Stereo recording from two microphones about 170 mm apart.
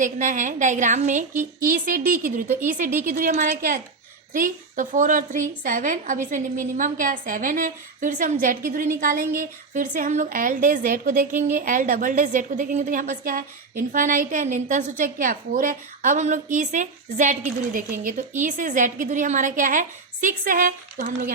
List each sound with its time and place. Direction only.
0.0 s a woman's voice: 50° right (ahead or behind)